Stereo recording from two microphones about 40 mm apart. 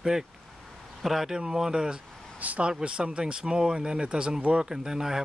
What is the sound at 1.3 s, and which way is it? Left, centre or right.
Speech, centre.